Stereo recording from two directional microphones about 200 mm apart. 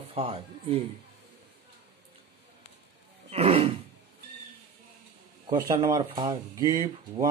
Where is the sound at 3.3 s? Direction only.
30° right (ahead or behind).